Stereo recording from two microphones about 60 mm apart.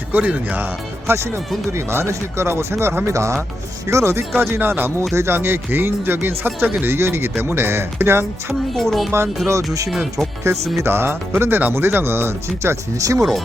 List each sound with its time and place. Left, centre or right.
0.1 s speech: right
1.0 s speech: right
4.4 s speech: right
8.7 s speech: centre
10.8 s speech: right
13.1 s speech: centre